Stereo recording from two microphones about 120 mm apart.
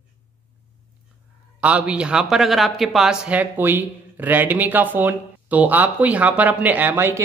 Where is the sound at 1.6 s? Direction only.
10° right (ahead or behind).